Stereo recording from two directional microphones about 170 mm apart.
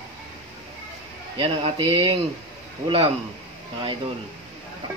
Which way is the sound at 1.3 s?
35° right (ahead or behind).